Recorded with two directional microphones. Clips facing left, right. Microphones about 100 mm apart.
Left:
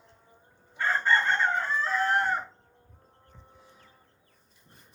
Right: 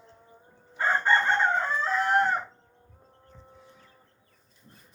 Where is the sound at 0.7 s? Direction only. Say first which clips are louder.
Right 2 dB; 25° right (ahead or behind).